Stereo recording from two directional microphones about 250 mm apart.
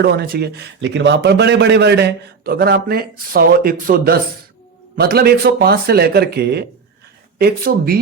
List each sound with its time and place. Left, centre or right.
0.0 s a man's voice: right